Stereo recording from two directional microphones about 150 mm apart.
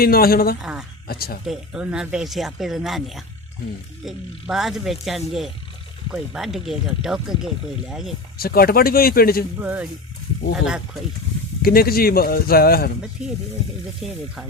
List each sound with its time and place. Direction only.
0.0 s speech: 85° left
0.6 s speech: 5° right (ahead or behind)
1.0 s speech: 90° left
1.5 s speech: 5° right (ahead or behind)
8.4 s speech: 90° left
11.6 s speech: 85° left
13.2 s speech: 5° right (ahead or behind)